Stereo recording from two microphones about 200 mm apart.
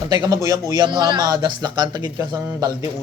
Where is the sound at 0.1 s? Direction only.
20° right (ahead or behind).